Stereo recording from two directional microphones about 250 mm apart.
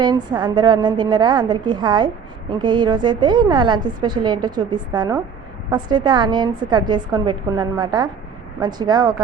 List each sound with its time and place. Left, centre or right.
0.0 s a woman's voice: centre